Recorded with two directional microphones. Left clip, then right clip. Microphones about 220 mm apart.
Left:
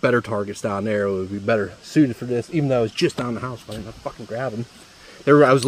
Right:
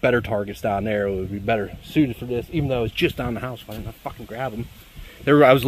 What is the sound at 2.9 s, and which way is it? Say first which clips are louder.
Speech: left 1 dB; 5° right (ahead or behind).